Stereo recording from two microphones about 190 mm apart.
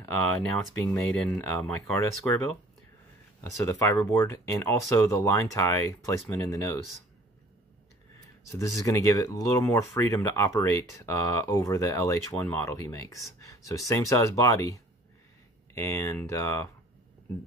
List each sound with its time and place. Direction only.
0.0 s speech: 5° left (ahead or behind)
3.3 s speech: 15° left (ahead or behind)
8.5 s speech: 15° left (ahead or behind)